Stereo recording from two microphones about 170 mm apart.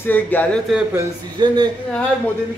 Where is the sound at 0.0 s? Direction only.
10° left (ahead or behind).